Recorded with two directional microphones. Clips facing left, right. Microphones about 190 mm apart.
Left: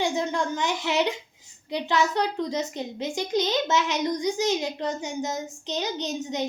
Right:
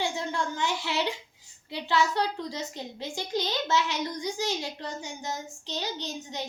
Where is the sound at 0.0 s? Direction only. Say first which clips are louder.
Left 5 dB; 20° left (ahead or behind).